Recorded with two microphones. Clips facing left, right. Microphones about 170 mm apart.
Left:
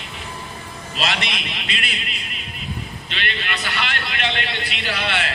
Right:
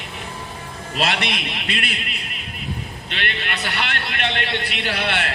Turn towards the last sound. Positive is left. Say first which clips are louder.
# right 1 dB
turn(degrees=-55)  # may be behind; listen again after turning